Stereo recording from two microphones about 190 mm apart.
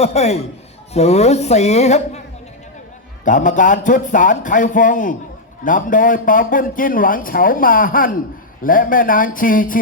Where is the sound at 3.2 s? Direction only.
40° left (ahead or behind).